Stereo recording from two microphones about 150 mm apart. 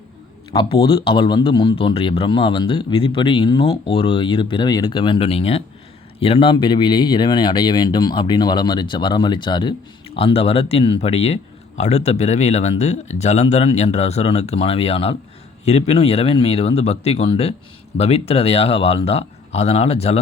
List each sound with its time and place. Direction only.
0.5 s speech: 35° left (ahead or behind)